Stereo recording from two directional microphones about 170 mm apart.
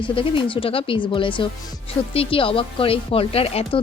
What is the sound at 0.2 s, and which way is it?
Speech, 30° left (ahead or behind).